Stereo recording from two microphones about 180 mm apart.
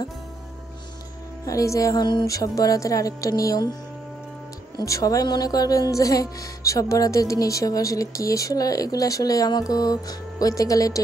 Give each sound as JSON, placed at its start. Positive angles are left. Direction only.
{"t": 1.4, "sound": "a woman's voice", "side_deg": 20}
{"t": 4.7, "sound": "a woman's voice", "side_deg": 20}